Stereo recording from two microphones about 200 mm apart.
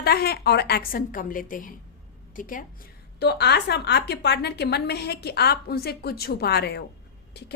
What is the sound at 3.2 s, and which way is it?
A woman's voice, 55° left (ahead or behind).